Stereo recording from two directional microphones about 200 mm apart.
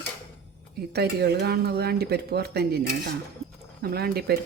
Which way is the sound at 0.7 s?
50° right (ahead or behind).